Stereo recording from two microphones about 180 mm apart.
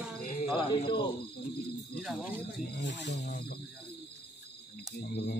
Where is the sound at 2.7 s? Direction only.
75° left (ahead or behind).